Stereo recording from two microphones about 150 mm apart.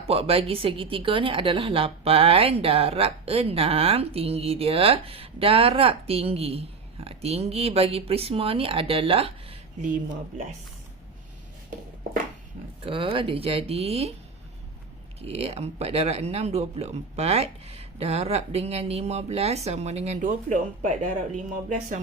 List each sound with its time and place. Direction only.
0.1 s a woman's voice: 40° right (ahead or behind)
12.8 s a woman's voice: 35° right (ahead or behind)
15.2 s speech: 40° right (ahead or behind)